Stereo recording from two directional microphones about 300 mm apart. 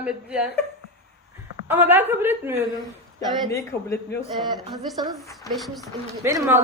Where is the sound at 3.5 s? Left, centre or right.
Centre.